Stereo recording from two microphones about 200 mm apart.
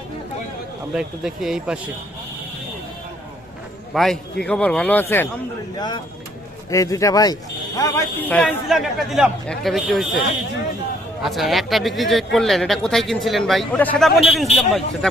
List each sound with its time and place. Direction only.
0.9 s speech: 5° right (ahead or behind)
3.9 s speech: centre (ahead or behind)
5.7 s a man's voice: 20° left (ahead or behind); by 10.1 s centre (ahead or behind)
11.2 s speech: centre (ahead or behind)